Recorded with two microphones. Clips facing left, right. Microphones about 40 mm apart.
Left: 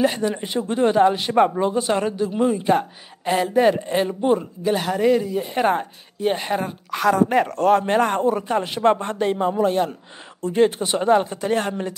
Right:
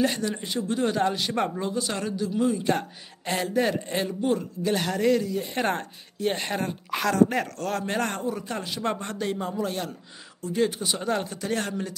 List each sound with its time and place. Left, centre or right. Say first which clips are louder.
0.0 s speech: left 5 dB; centre
2.7 s speech: left 7 dB; centre
4.6 s speech: left 5 dB; centre
7.1 s speech: left 5 dB; left
8.2 s speech: left 10 dB; left
11.1 s speech: left 11 dB; left